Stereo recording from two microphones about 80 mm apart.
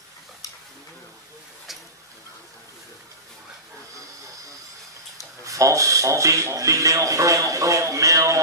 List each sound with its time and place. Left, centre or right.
5.4 s speech: right